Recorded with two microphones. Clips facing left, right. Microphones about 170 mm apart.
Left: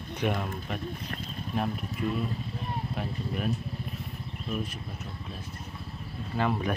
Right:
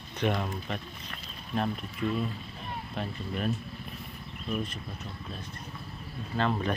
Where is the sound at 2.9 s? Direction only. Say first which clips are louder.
Right 3 dB; 5° left (ahead or behind).